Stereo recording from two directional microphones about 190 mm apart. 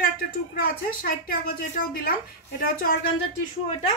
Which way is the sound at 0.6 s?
50° left (ahead or behind).